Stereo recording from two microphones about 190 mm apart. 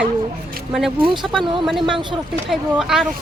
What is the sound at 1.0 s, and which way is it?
Speech, 25° right (ahead or behind).